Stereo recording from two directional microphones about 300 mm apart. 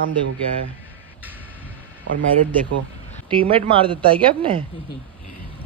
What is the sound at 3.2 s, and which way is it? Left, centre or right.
A woman's voice, centre.